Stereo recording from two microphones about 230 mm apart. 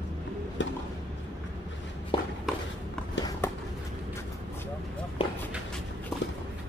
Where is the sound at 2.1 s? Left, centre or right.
Left.